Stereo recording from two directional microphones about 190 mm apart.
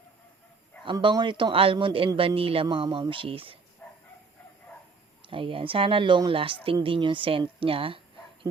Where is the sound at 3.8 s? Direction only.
10° left (ahead or behind).